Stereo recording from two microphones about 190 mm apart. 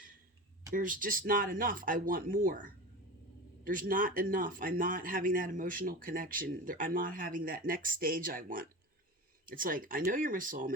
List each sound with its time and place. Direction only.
0.7 s speech: 45° right (ahead or behind)